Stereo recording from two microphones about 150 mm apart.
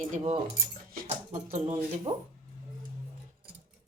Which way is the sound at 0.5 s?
75° right (ahead or behind).